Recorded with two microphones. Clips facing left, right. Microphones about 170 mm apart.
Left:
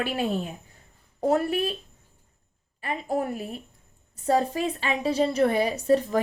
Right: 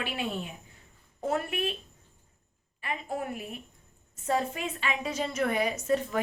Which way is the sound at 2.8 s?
35° left (ahead or behind).